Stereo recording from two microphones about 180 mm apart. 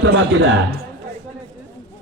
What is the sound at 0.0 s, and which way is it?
Speech, 90° right.